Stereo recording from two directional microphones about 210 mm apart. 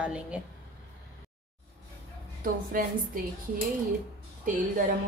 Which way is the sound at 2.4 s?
40° right (ahead or behind).